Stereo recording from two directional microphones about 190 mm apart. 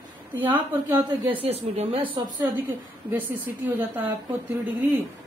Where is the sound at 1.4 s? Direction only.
30° right (ahead or behind).